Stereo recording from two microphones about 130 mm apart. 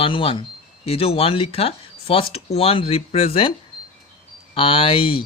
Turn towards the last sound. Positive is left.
turn(degrees=45)  # may be behind; listen again after turning